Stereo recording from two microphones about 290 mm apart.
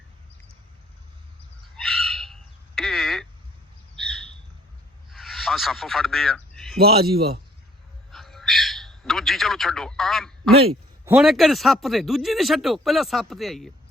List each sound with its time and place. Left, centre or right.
1.7 s bird: centre
3.9 s squawk: centre
5.1 s a sound: centre
6.7 s a man's voice: right
8.1 s bird: centre
11.0 s speech: centre